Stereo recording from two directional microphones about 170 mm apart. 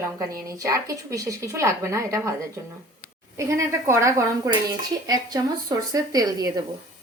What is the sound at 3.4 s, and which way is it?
A woman's voice, 20° right (ahead or behind).